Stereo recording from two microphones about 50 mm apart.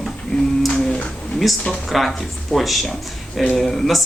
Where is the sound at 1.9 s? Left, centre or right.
Centre.